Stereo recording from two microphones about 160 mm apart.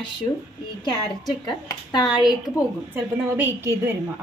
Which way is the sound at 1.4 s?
25° left (ahead or behind).